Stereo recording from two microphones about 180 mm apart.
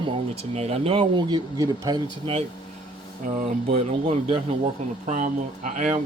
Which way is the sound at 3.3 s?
40° right (ahead or behind).